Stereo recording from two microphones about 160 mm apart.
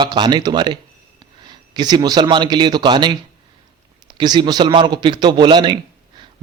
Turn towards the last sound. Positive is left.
turn(degrees=-30)  # may be behind; listen again after turning